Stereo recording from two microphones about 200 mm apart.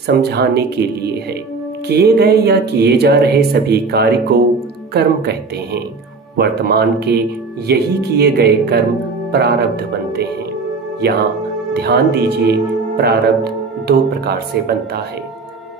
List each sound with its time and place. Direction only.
0.0 s speech: 55° right (ahead or behind)
11.7 s speech: 55° right (ahead or behind)